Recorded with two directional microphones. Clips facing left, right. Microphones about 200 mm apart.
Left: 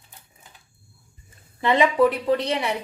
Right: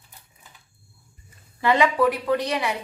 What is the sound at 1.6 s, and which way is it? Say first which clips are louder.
A woman's voice: left 1 dB; 20° left (ahead or behind).